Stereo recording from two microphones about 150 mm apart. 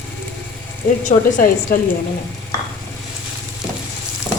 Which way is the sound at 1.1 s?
65° left (ahead or behind).